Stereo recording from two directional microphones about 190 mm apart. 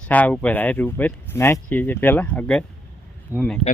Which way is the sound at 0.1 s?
10° left (ahead or behind).